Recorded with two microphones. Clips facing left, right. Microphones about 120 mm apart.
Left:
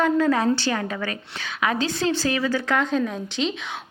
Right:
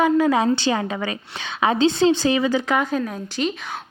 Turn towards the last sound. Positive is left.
turn(degrees=-5)  # may be behind; listen again after turning